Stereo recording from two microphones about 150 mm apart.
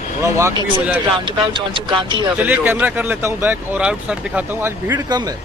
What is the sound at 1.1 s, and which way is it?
Speech, 35° right (ahead or behind).